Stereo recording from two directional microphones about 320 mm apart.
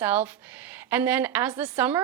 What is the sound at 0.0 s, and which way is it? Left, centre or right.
A woman's voice, centre.